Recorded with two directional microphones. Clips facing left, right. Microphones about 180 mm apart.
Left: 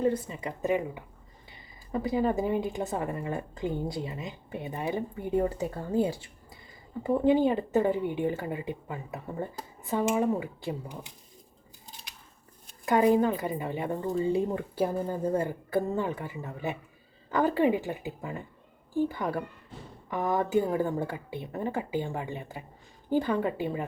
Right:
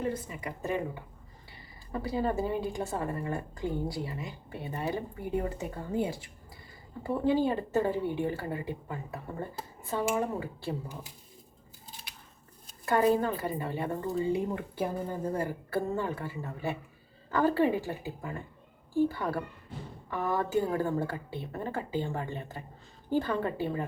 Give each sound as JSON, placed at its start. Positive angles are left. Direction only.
{"t": 0.0, "sound": "a woman's voice", "side_deg": 30}
{"t": 5.5, "sound": "a woman's voice", "side_deg": 35}
{"t": 7.0, "sound": "speech", "side_deg": 20}
{"t": 12.8, "sound": "speech", "side_deg": 15}
{"t": 14.3, "sound": "a woman's voice", "side_deg": 30}
{"t": 15.4, "sound": "speech", "side_deg": 20}